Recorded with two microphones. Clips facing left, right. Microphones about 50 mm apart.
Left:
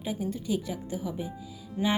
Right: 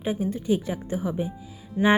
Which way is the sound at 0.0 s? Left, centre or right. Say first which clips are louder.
Right 5 dB; right.